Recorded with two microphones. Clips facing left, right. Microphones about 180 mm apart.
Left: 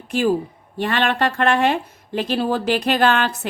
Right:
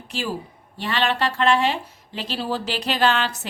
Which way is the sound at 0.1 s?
50° left (ahead or behind).